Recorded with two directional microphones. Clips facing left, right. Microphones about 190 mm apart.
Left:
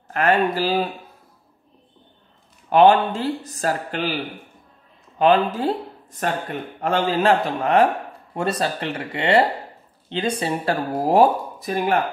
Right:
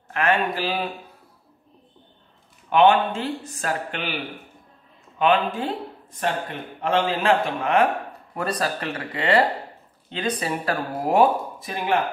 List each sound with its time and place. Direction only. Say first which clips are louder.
0.1 s speech: left 3 dB; 40° left (ahead or behind)
2.7 s speech: left 3 dB; 40° left (ahead or behind)
5.2 s speech: left 4 dB; 35° left (ahead or behind)
8.4 s speech: left 3 dB; 25° left (ahead or behind); by 12.0 s 45° left (ahead or behind)